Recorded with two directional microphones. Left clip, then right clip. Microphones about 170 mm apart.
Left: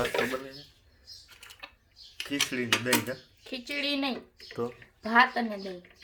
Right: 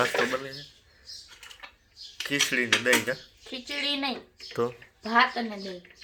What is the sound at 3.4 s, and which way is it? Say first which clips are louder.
Speech: right 1 dB; 40° left (ahead or behind).